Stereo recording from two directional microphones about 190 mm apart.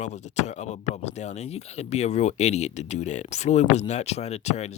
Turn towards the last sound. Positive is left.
turn(degrees=35)  # may be behind; listen again after turning